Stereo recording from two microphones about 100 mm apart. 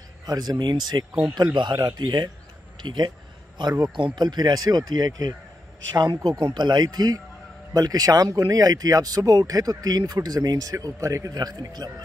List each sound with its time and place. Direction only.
0.2 s speech: 45° right (ahead or behind)
6.4 s speech: 50° right (ahead or behind)